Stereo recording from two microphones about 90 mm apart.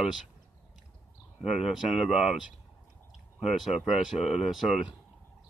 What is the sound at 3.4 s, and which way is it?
Speech, 5° right (ahead or behind).